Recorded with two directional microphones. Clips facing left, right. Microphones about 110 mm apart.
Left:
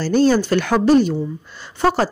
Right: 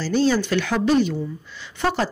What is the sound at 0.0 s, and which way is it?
A woman's voice, 50° left (ahead or behind).